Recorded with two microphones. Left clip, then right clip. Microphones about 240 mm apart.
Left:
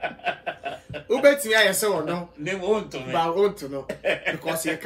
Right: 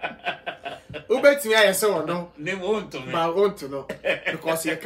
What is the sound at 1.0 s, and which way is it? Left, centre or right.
Speech, centre.